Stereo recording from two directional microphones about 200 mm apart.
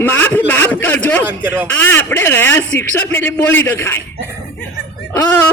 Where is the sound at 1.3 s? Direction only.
10° right (ahead or behind).